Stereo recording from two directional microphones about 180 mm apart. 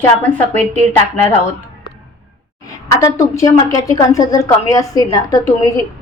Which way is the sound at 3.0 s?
15° left (ahead or behind).